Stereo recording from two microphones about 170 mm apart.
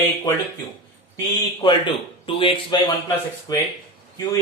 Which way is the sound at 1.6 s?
30° left (ahead or behind).